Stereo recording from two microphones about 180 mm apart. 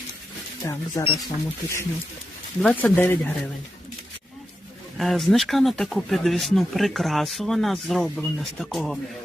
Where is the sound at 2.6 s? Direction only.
10° left (ahead or behind).